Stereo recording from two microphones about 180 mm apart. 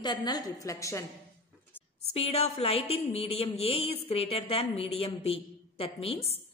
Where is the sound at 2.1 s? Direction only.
35° left (ahead or behind).